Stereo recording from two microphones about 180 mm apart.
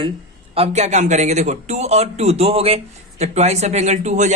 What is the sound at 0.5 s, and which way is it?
A man's voice, 35° right (ahead or behind).